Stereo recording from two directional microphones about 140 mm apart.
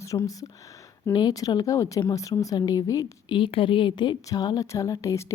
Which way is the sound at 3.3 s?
40° left (ahead or behind).